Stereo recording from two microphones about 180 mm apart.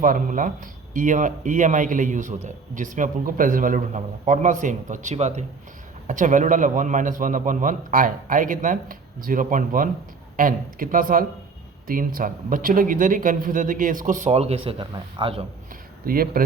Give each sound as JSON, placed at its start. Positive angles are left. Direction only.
{"t": 0.0, "sound": "speech", "side_deg": -50}
{"t": 16.0, "sound": "speech", "side_deg": -55}